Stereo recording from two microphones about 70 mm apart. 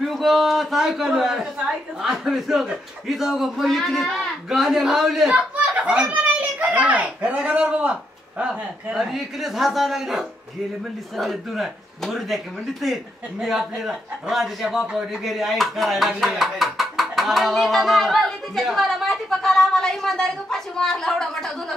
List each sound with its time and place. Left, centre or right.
0.0 s a child's voice: centre
6.6 s a sound: centre
7.2 s speech: centre